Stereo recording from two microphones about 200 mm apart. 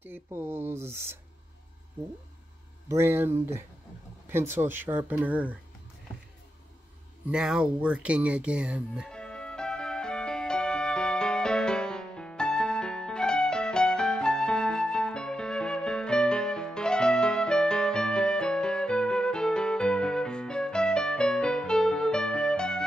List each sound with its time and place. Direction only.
0.0 s speech: 10° right (ahead or behind)
2.9 s speech: 10° right (ahead or behind)
7.2 s a sound: 5° right (ahead or behind)